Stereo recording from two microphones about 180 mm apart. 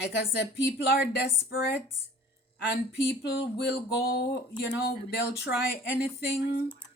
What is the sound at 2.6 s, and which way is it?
Speech, 75° left (ahead or behind).